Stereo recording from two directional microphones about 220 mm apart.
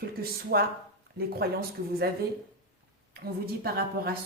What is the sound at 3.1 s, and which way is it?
Speech, 45° right (ahead or behind).